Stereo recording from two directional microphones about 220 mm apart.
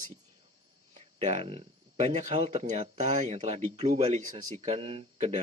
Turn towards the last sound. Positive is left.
turn(degrees=-30)  # may be behind; listen again after turning